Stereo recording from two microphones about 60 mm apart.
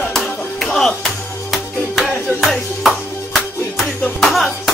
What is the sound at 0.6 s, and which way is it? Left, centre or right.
Music, centre.